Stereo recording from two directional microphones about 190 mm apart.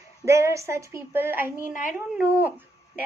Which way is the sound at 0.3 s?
15° right (ahead or behind).